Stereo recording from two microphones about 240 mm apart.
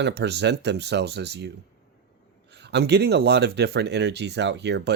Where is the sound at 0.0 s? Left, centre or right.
Right.